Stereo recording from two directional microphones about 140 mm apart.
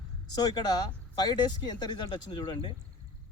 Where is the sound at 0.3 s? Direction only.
30° left (ahead or behind).